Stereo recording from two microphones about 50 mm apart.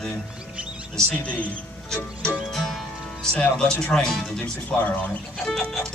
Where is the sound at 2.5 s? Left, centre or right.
Centre.